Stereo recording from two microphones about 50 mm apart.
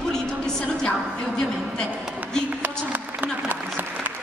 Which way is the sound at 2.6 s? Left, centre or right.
Right.